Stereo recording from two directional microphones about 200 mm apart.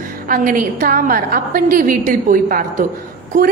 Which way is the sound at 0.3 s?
45° right (ahead or behind).